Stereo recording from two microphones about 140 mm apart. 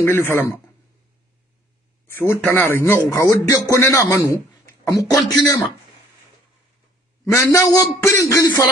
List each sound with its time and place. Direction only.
0.0 s speech: 15° left (ahead or behind)
2.0 s a man's voice: 15° left (ahead or behind)
7.2 s a man's voice: 20° left (ahead or behind)